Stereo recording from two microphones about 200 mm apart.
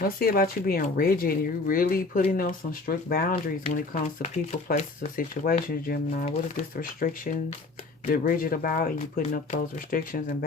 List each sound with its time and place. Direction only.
0.0 s speech: 45° left (ahead or behind)